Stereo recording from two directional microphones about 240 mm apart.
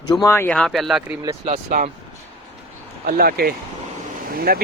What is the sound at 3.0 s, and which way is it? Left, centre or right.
Speech, right.